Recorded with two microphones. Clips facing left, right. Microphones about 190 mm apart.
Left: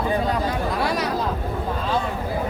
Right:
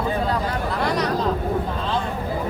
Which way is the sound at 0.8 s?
10° left (ahead or behind).